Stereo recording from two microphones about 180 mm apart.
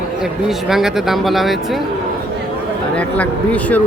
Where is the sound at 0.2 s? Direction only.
Centre (ahead or behind).